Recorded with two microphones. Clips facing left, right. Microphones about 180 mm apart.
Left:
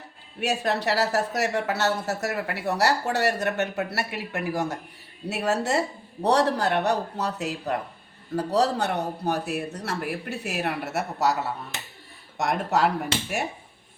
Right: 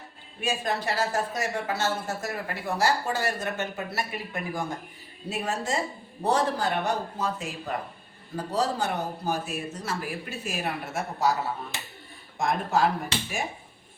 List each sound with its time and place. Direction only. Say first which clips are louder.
0.3 s speech: left 3 dB; 70° left (ahead or behind)
12.4 s speech: left 1 dB; 70° left (ahead or behind)